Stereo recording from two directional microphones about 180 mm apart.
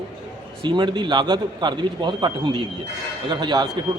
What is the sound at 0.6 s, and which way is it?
A man's voice, 25° right (ahead or behind).